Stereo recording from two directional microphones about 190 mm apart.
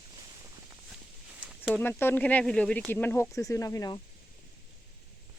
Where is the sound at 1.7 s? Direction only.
10° left (ahead or behind).